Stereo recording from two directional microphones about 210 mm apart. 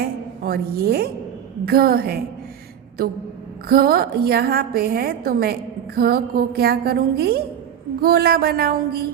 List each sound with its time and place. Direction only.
0.0 s a woman's voice: 45° right (ahead or behind)
3.7 s a woman's voice: 45° right (ahead or behind)